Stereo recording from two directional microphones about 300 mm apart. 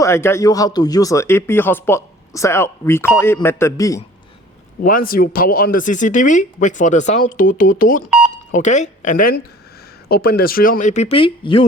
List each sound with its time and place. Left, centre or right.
0.0 s speech: centre
4.8 s speech: left